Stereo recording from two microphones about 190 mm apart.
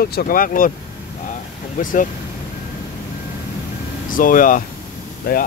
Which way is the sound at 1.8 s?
45° left (ahead or behind).